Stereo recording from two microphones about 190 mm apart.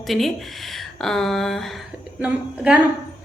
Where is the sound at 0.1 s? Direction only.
Centre (ahead or behind).